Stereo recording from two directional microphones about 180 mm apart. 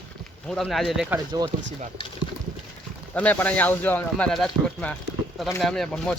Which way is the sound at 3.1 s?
10° left (ahead or behind).